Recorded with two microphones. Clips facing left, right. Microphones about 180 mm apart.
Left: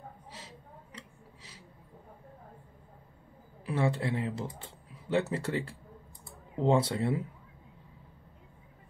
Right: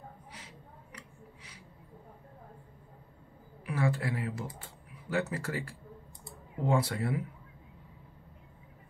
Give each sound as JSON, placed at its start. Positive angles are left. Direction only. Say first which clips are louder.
{"t": 3.6, "sound": "speech", "louder": "left 2 dB", "side_deg": 30}